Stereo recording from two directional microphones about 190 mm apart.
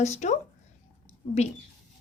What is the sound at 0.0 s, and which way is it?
Speech, 40° left (ahead or behind).